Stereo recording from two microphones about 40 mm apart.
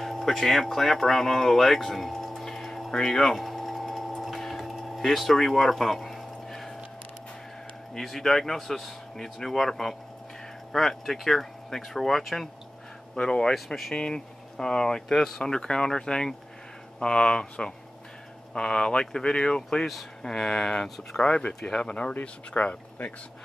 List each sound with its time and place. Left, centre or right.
0.0 s speech: centre
3.3 s printer: centre
4.4 s a sound: centre
7.9 s speech: centre
13.2 s speech: centre
15.0 s speech: centre
21.2 s speech: left